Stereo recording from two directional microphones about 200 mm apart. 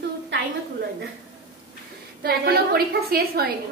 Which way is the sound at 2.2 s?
50° right (ahead or behind).